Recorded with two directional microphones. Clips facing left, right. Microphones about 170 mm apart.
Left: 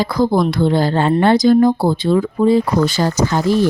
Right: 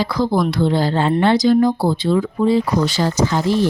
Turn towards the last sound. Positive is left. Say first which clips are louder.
# left 2 dB
turn(degrees=45)  # may be behind; listen again after turning